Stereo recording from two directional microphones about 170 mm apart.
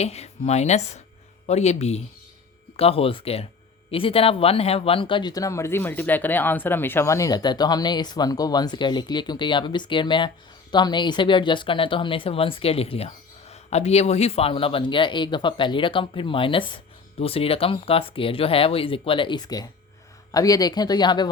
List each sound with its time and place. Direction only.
0.0 s speech: 40° left (ahead or behind)